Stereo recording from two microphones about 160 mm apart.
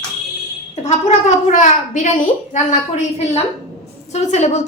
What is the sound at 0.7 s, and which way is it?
A woman's voice, 45° left (ahead or behind).